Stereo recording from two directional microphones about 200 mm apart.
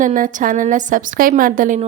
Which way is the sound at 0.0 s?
40° right (ahead or behind).